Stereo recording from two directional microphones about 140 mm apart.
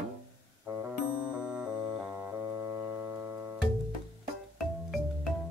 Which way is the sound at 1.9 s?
15° right (ahead or behind).